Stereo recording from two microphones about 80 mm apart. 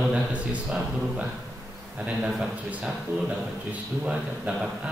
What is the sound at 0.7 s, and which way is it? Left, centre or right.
Speech, centre.